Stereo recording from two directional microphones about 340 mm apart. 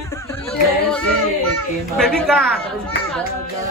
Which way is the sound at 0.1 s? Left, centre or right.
Centre.